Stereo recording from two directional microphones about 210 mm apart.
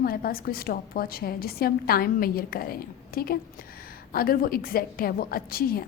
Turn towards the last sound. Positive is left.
turn(degrees=45)  # may be behind; listen again after turning